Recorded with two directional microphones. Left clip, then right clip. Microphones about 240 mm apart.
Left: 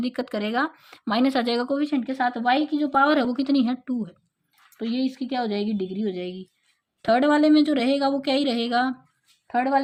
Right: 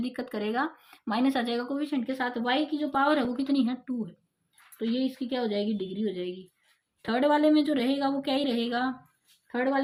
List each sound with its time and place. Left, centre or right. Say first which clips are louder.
0.0 s speech: left 5 dB; left